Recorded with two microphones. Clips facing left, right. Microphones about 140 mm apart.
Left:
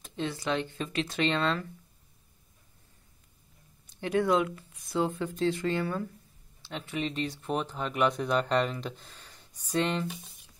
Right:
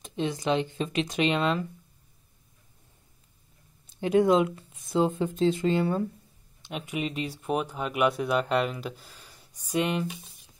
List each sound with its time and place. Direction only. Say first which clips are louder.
0.0 s speech: right 4 dB; 20° right (ahead or behind)
3.8 s speech: right 5 dB; 20° right (ahead or behind)